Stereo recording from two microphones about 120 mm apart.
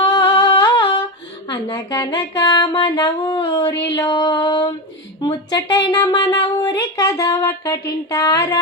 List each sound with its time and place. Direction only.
0.0 s humming: 35° left (ahead or behind)
1.5 s speech: 30° left (ahead or behind)